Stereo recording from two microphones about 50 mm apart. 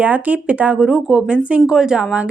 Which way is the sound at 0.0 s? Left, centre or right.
Right.